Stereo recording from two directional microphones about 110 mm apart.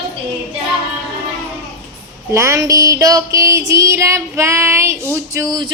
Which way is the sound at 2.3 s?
25° right (ahead or behind).